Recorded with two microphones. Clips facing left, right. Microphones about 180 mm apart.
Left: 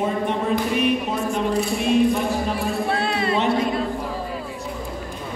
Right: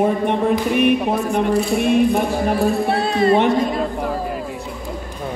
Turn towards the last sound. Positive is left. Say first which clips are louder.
# right 3 dB
turn(degrees=-60)  # may be behind; listen again after turning